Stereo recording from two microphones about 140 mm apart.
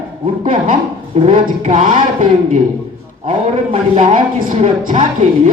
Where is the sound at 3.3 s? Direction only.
50° right (ahead or behind).